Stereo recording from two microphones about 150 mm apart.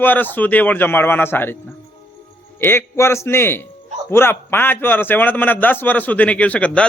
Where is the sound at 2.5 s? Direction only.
15° left (ahead or behind).